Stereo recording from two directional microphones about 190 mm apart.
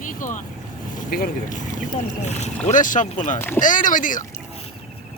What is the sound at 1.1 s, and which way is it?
Speech, 45° left (ahead or behind).